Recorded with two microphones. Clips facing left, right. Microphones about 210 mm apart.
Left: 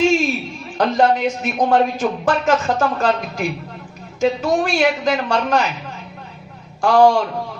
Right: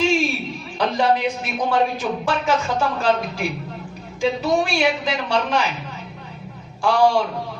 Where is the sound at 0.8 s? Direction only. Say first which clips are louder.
Left 3 dB; 50° left (ahead or behind).